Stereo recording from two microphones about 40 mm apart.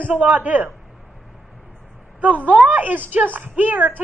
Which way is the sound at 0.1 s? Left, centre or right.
Right.